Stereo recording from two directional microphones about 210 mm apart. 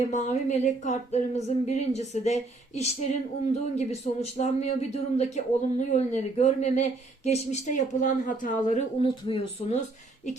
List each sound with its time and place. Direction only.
0.1 s speech: 35° left (ahead or behind)
9.0 s speech: 25° left (ahead or behind)